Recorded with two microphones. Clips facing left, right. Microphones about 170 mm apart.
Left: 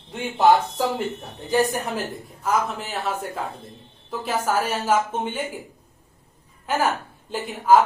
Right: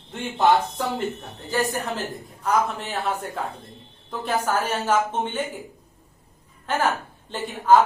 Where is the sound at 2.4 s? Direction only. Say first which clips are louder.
Right 1 dB; 5° left (ahead or behind).